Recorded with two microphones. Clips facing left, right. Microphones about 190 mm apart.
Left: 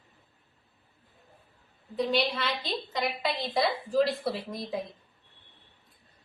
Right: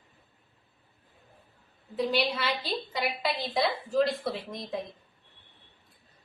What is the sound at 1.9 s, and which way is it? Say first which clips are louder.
A woman's voice: even; centre (ahead or behind).